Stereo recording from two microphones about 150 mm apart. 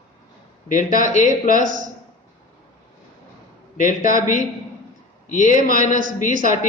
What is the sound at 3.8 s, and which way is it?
A man's voice, 55° left (ahead or behind).